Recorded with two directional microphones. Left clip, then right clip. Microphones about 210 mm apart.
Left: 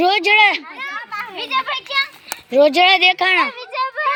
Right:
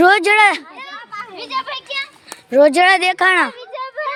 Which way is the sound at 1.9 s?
15° right (ahead or behind).